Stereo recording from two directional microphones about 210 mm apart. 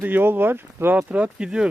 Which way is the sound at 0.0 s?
10° right (ahead or behind).